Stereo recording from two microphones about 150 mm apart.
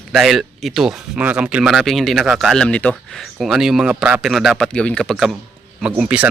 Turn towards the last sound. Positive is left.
turn(degrees=-10)  # may be behind; listen again after turning